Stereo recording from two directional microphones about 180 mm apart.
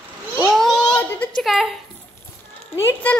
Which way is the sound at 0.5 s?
5° left (ahead or behind).